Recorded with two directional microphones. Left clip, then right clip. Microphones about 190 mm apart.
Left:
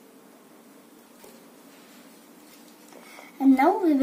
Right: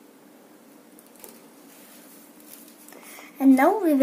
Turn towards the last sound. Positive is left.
turn(degrees=-35)  # may be behind; listen again after turning